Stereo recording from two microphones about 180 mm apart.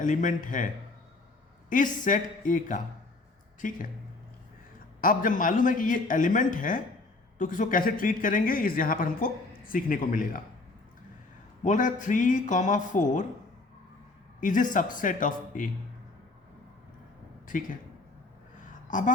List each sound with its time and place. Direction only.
0.0 s speech: 45° left (ahead or behind)
1.7 s speech: 45° left (ahead or behind)
4.9 s speech: 50° left (ahead or behind)
11.6 s speech: 45° left (ahead or behind)
14.4 s speech: 45° left (ahead or behind)
17.4 s a man's voice: 50° left (ahead or behind)
18.9 s a sound: 45° left (ahead or behind)